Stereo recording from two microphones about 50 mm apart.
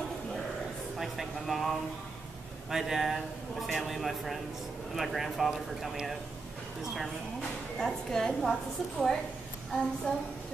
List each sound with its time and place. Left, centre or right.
0.9 s speech: centre
7.8 s a woman's voice: centre
10.1 s a woman's voice: left